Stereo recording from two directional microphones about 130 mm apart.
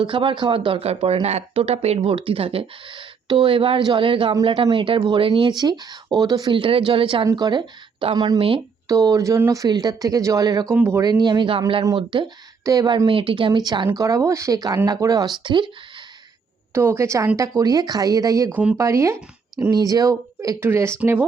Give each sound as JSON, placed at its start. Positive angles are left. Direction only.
{"t": 0.0, "sound": "speech", "side_deg": -40}
{"t": 8.4, "sound": "speech", "side_deg": -45}
{"t": 8.9, "sound": "a woman's voice", "side_deg": -25}
{"t": 11.2, "sound": "speech", "side_deg": -35}
{"t": 12.6, "sound": "a woman's voice", "side_deg": -30}
{"t": 16.7, "sound": "a woman's voice", "side_deg": -20}
{"t": 18.5, "sound": "speech", "side_deg": -10}
{"t": 18.8, "sound": "a woman's voice", "side_deg": -20}